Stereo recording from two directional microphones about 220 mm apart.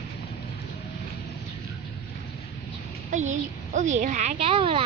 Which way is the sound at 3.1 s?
35° right (ahead or behind).